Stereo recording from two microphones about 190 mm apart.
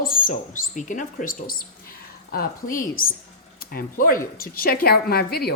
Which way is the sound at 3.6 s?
50° left (ahead or behind).